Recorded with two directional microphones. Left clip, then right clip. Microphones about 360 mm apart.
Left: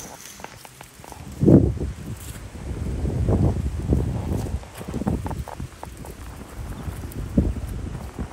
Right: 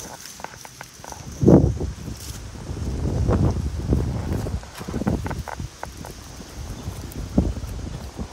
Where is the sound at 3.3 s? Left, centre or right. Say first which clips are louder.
Even; centre.